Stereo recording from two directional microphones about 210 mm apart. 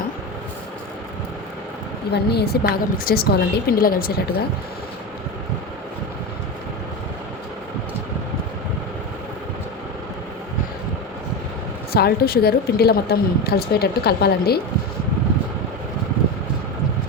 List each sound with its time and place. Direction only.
2.1 s a woman's voice: 50° left (ahead or behind)
11.9 s a woman's voice: 50° left (ahead or behind)